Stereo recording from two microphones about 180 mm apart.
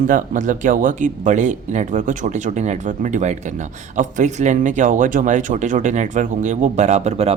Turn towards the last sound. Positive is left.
turn(degrees=-35)  # may be behind; listen again after turning